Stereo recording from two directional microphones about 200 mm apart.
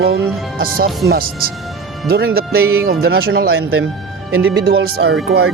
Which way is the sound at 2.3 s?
50° right (ahead or behind).